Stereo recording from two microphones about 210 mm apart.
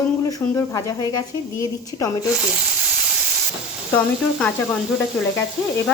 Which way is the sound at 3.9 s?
5° left (ahead or behind).